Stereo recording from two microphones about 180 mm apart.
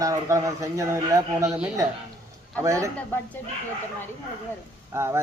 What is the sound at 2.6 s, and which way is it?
Speech, 15° right (ahead or behind).